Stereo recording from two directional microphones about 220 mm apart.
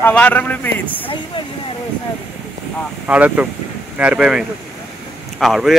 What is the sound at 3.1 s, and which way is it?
Speech, 5° right (ahead or behind).